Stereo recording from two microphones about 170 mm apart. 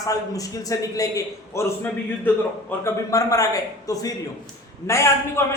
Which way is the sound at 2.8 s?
20° left (ahead or behind).